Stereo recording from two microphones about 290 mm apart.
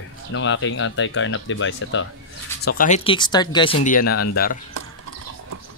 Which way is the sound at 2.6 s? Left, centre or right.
Left.